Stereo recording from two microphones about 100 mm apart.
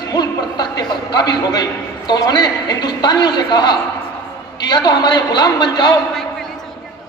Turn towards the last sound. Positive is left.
turn(degrees=45)  # may be behind; listen again after turning